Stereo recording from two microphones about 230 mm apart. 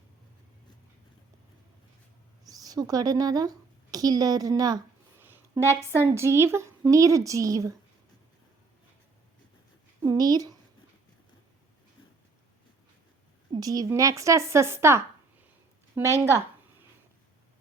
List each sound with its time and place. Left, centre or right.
2.5 s speech: centre
10.0 s a sound: centre
13.5 s speech: centre